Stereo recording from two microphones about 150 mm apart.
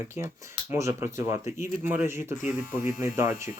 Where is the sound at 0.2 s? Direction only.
20° right (ahead or behind).